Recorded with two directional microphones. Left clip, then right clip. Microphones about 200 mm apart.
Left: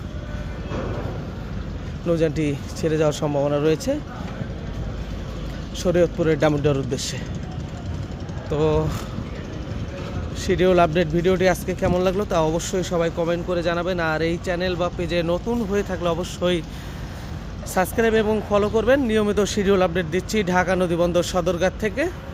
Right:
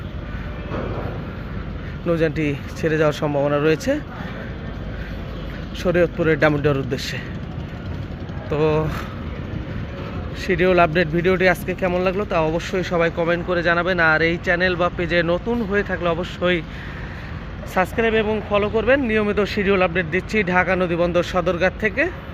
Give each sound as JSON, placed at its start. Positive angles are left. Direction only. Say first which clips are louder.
{"t": 2.0, "sound": "speech", "louder": "right 1 dB", "side_deg": 15}
{"t": 5.8, "sound": "speech", "louder": "right 1 dB", "side_deg": 15}
{"t": 8.4, "sound": "speech", "louder": "right 2 dB", "side_deg": 15}
{"t": 10.4, "sound": "speech", "louder": "right 1 dB", "side_deg": 20}
{"t": 17.7, "sound": "speech", "louder": "right 1 dB", "side_deg": 25}